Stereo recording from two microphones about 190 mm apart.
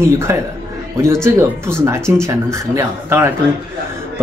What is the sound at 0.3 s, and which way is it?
Speech, 15° right (ahead or behind).